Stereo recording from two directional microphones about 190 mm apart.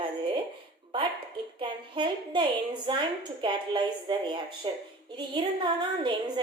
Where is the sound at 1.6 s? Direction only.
25° right (ahead or behind).